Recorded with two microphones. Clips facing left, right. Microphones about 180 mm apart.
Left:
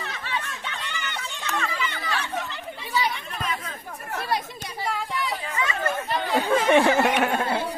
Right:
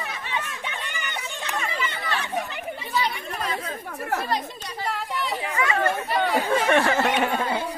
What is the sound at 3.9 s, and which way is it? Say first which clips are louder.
Chatter: right 7 dB; 70° right (ahead or behind).